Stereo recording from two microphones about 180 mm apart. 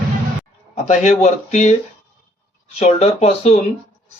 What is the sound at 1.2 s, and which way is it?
Speech, 40° left (ahead or behind).